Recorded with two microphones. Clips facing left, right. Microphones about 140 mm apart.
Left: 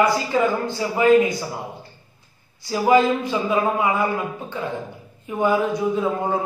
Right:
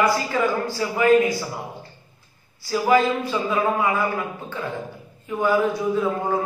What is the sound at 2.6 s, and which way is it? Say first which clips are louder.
A man's voice: left 2 dB; 20° left (ahead or behind).